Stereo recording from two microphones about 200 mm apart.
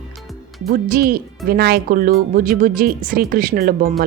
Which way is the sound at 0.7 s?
45° right (ahead or behind).